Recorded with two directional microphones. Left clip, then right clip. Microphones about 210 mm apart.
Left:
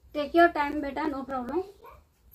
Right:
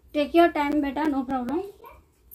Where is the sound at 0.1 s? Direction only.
45° right (ahead or behind).